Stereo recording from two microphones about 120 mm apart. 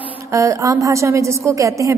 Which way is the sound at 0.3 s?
25° right (ahead or behind).